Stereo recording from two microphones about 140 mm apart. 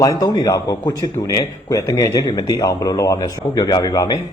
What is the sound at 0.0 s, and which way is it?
A man's voice, 25° left (ahead or behind).